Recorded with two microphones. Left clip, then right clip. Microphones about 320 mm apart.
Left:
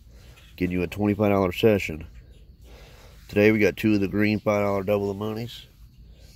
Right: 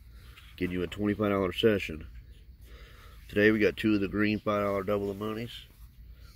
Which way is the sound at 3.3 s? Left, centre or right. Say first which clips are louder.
Left 5 dB; left.